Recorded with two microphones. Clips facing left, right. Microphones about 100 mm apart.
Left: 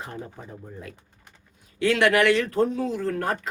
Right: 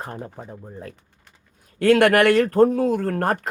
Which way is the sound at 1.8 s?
50° right (ahead or behind).